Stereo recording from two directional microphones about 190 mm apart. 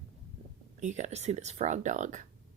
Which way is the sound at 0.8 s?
40° right (ahead or behind).